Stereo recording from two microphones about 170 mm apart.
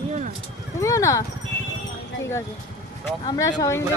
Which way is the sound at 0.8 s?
20° left (ahead or behind).